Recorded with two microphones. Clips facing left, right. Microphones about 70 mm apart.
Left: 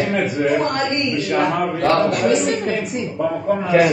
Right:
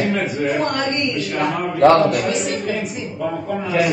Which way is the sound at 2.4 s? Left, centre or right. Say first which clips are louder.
Left 2 dB; left.